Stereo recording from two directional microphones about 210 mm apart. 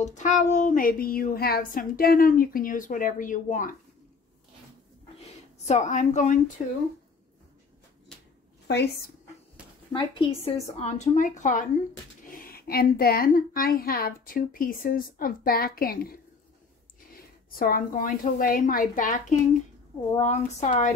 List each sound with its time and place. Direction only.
0.0 s child singing: 35° left (ahead or behind)
5.7 s child singing: 35° left (ahead or behind)
8.6 s a woman's voice: 50° left (ahead or behind)
9.9 s child singing: 25° left (ahead or behind)
12.3 s a woman's voice: 45° left (ahead or behind)
17.6 s child singing: 45° left (ahead or behind)
20.2 s child singing: 35° left (ahead or behind)